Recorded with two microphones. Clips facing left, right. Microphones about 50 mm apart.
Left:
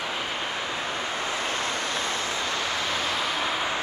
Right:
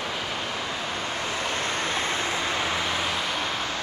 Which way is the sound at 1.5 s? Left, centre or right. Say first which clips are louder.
Right 1 dB; right.